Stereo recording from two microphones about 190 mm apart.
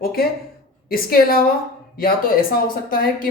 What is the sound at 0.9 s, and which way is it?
Speech, 50° left (ahead or behind).